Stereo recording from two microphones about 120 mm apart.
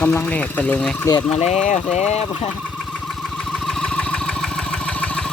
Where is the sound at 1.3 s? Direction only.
65° left (ahead or behind).